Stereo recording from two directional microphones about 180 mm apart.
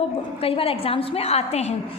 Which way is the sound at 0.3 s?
30° left (ahead or behind).